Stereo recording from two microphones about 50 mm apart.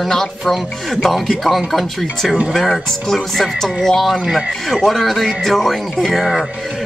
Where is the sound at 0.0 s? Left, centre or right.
Centre.